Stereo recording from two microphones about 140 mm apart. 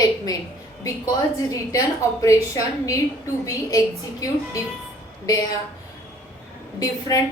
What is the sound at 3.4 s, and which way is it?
Speech, 25° left (ahead or behind).